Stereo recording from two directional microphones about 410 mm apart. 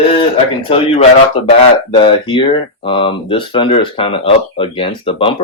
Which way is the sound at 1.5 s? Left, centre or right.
Centre.